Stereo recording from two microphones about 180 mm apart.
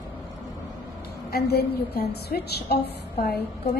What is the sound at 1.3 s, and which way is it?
A woman's voice, 60° left (ahead or behind).